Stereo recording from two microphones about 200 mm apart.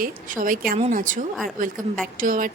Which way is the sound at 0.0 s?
45° right (ahead or behind).